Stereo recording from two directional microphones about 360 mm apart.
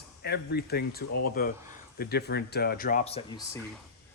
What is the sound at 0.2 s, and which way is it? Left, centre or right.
Speech, left.